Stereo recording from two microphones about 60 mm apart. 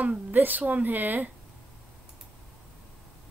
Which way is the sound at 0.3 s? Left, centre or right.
Right.